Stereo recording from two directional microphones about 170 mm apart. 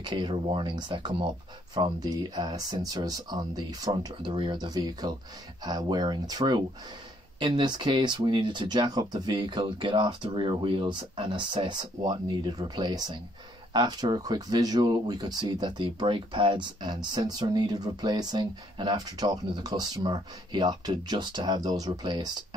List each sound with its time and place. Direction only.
0.0 s speech: 30° right (ahead or behind)